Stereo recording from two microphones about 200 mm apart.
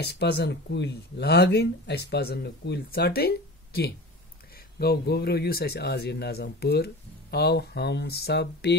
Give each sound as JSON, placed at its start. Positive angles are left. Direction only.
{"t": 0.0, "sound": "speech", "side_deg": 55}